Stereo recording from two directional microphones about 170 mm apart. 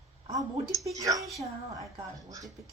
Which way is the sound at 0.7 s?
Centre (ahead or behind).